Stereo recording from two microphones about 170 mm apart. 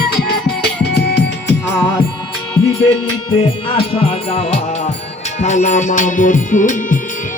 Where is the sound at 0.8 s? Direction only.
75° left (ahead or behind).